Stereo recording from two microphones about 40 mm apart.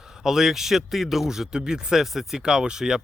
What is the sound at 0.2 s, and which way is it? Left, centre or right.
Speech, centre.